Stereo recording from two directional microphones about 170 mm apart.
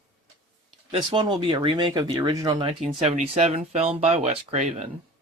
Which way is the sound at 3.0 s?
40° right (ahead or behind).